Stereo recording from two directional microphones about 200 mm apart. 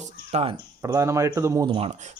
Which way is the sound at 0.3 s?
30° right (ahead or behind).